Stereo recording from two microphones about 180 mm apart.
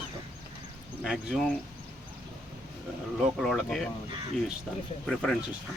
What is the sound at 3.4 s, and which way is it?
Speech, centre (ahead or behind).